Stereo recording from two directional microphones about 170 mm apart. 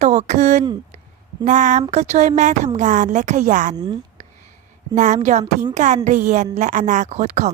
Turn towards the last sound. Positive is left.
turn(degrees=-45)  # may be behind; listen again after turning